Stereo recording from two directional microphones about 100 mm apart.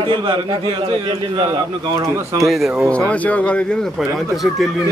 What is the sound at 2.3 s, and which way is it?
Speech, centre (ahead or behind).